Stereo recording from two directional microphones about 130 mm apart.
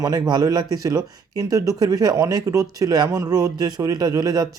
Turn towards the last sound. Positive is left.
turn(degrees=-30)  # may be behind; listen again after turning